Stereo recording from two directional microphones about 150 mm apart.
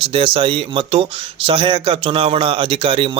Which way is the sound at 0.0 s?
35° right (ahead or behind).